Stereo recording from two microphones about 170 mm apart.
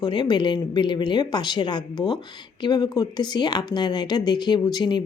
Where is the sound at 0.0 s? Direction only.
25° left (ahead or behind).